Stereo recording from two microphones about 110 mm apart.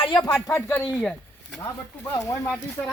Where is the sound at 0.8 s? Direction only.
5° left (ahead or behind).